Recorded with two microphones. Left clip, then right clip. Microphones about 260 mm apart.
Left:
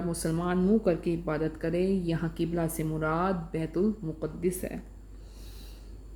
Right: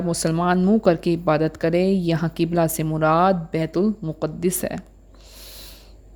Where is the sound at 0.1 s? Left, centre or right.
Right.